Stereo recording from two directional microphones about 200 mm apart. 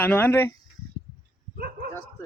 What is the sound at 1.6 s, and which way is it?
Speech, 50° right (ahead or behind).